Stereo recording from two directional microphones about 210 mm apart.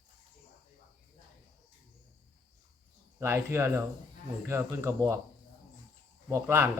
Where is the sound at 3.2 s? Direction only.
10° right (ahead or behind).